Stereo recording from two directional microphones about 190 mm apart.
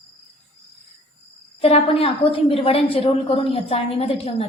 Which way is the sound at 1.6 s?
30° left (ahead or behind).